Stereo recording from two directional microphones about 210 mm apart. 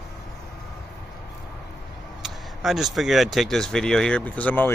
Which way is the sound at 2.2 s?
Centre (ahead or behind).